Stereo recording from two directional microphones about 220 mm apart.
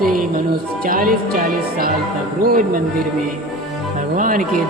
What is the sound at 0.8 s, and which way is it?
Speech, 40° right (ahead or behind).